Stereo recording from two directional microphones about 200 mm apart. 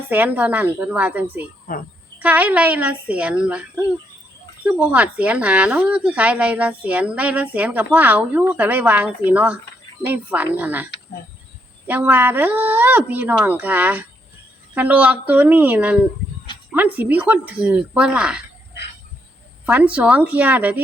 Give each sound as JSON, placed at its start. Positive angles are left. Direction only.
{"t": 0.1, "sound": "speech", "side_deg": -10}
{"t": 1.7, "sound": "speech", "side_deg": 45}
{"t": 2.1, "sound": "speech", "side_deg": -10}
{"t": 4.6, "sound": "speech", "side_deg": -5}
{"t": 11.9, "sound": "speech", "side_deg": -10}
{"t": 19.6, "sound": "speech", "side_deg": -5}